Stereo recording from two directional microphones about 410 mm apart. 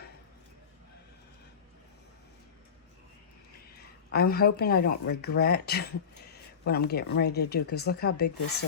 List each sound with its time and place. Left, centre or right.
4.1 s speech: left